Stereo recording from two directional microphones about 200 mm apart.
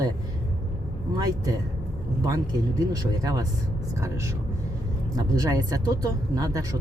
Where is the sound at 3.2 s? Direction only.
15° right (ahead or behind).